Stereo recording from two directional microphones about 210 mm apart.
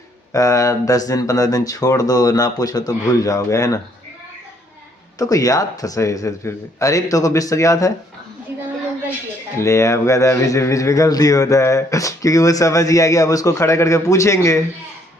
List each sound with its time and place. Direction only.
0.3 s speech: 15° left (ahead or behind)
5.2 s speech: 15° left (ahead or behind)
9.6 s speech: 15° left (ahead or behind)